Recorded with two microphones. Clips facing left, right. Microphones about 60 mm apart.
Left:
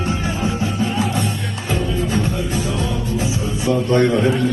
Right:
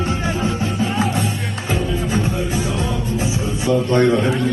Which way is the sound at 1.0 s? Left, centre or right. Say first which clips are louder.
Even; centre.